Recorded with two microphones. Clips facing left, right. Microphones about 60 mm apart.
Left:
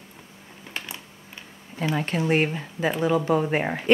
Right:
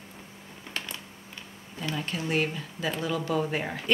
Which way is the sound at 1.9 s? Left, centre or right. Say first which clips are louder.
Left 6 dB; left.